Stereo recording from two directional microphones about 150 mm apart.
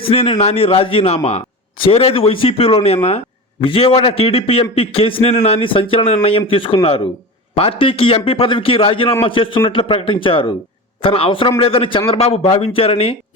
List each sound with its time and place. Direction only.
0.0 s a man's voice: 40° left (ahead or behind)